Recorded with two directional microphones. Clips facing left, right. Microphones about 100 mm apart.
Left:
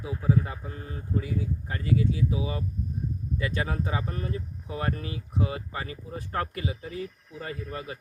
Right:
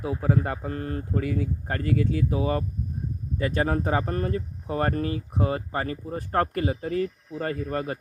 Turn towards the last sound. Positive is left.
turn(degrees=-50)  # may be behind; listen again after turning